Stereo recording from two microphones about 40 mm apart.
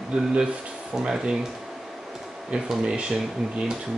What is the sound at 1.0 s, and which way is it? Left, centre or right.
Speech, centre.